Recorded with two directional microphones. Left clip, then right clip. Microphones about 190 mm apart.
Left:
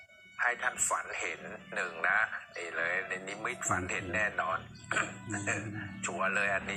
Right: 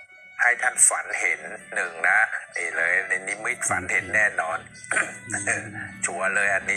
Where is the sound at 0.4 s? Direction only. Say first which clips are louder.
Right 10 dB; 25° right (ahead or behind).